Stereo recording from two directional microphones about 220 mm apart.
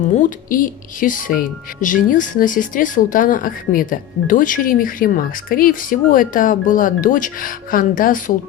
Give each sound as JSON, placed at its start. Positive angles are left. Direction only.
{"t": 0.1, "sound": "speech", "side_deg": 35}